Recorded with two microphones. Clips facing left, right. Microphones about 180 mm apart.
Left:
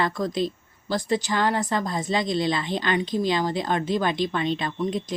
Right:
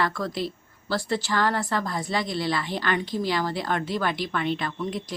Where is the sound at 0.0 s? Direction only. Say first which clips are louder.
Left 3 dB; 20° left (ahead or behind).